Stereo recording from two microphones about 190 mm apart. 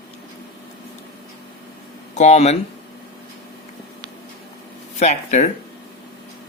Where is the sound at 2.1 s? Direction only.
35° left (ahead or behind).